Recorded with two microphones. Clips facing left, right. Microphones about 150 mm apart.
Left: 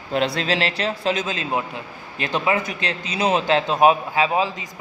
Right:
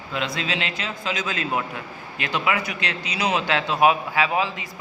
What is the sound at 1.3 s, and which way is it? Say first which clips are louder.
A man's voice: left 1 dB; 25° left (ahead or behind).